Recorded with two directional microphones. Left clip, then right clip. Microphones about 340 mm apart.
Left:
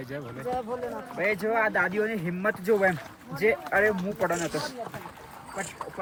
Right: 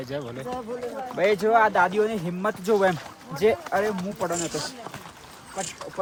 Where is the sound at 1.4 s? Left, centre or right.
Centre.